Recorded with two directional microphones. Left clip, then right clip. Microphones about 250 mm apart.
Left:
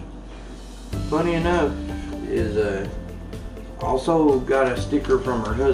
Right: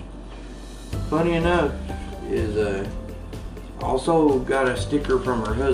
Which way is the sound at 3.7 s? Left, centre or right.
Centre.